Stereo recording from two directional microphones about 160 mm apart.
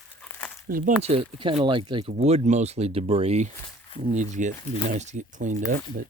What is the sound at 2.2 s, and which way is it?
Speech, 45° right (ahead or behind).